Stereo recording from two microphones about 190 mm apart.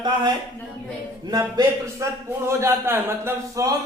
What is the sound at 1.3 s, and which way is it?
A man's voice, 15° right (ahead or behind).